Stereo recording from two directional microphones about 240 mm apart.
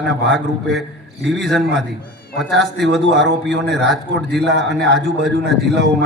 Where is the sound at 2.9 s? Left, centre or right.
Right.